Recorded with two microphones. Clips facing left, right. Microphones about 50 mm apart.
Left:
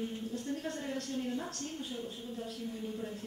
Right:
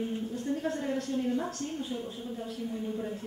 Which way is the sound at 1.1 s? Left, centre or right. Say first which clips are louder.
Right 7 dB; right.